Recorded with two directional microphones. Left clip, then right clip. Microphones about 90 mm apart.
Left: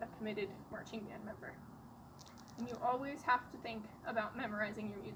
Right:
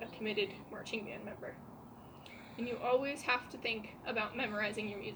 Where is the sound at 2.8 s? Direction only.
30° left (ahead or behind).